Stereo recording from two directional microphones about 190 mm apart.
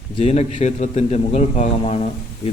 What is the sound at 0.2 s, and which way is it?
A man's voice, 35° left (ahead or behind).